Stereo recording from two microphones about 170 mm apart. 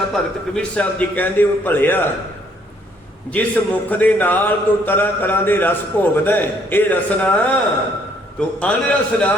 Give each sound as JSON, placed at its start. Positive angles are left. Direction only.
{"t": 0.1, "sound": "a man's voice", "side_deg": 5}
{"t": 3.2, "sound": "a man's voice", "side_deg": 10}